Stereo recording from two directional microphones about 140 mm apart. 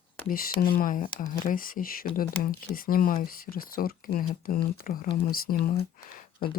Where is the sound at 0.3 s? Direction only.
90° left.